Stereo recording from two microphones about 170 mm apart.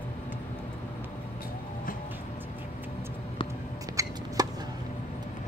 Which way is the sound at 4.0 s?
20° right (ahead or behind).